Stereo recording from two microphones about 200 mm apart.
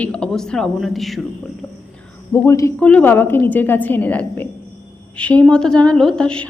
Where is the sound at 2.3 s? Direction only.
15° left (ahead or behind).